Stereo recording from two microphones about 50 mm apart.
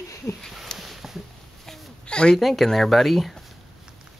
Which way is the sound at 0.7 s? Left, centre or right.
Centre.